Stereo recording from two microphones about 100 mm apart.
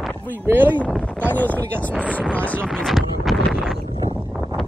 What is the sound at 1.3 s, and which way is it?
Speech, 15° left (ahead or behind).